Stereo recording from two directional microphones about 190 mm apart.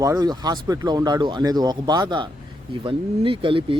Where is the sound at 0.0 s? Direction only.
20° right (ahead or behind).